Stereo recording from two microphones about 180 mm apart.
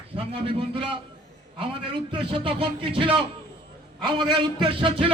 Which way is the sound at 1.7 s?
30° right (ahead or behind).